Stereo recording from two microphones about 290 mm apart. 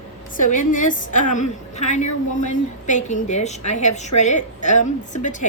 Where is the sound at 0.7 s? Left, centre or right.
Left.